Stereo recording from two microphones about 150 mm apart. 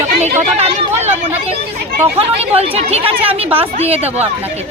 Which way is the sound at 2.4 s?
40° right (ahead or behind).